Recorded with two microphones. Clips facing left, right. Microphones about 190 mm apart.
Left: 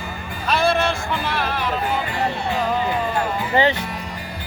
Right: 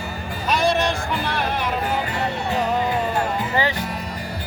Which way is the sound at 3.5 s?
25° left (ahead or behind).